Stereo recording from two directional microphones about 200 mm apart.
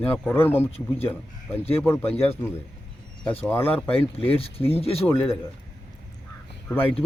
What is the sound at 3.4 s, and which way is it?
Speech, 10° left (ahead or behind).